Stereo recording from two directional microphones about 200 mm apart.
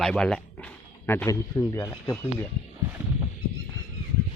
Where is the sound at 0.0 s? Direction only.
5° left (ahead or behind).